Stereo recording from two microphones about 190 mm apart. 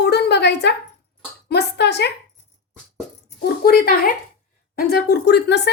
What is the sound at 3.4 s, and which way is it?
A woman's voice, 55° left (ahead or behind).